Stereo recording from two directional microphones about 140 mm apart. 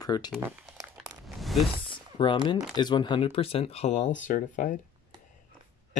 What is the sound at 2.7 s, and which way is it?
Speech, 35° left (ahead or behind).